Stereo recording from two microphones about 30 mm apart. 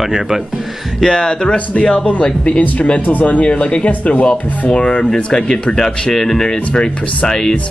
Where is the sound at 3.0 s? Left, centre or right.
Left.